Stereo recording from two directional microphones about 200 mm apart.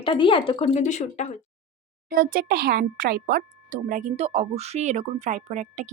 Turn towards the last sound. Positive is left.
turn(degrees=-35)  # may be behind; listen again after turning